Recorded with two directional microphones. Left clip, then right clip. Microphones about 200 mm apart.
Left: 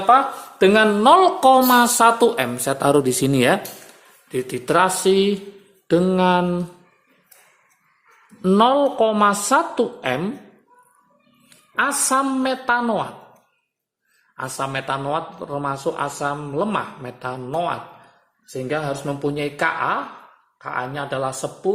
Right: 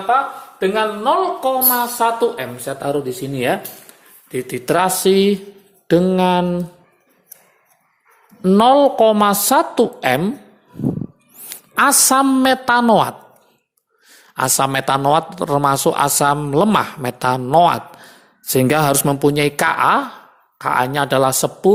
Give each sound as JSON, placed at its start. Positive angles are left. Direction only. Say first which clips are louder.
{"t": 0.6, "sound": "speech", "louder": "left 3 dB", "side_deg": 45}
{"t": 4.3, "sound": "speech", "louder": "right 2 dB", "side_deg": -15}
{"t": 8.4, "sound": "a woman's voice", "louder": "right 4 dB", "side_deg": -15}
{"t": 11.4, "sound": "a woman's voice", "louder": "right 6 dB", "side_deg": -40}
{"t": 14.3, "sound": "speech", "louder": "right 9 dB", "side_deg": -35}
{"t": 18.5, "sound": "speech", "louder": "right 10 dB", "side_deg": -50}